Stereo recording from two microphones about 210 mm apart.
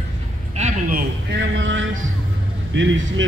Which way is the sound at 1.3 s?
60° right (ahead or behind).